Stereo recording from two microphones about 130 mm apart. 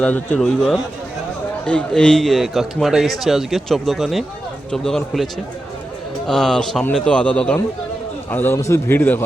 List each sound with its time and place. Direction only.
0.0 s speech: 5° left (ahead or behind)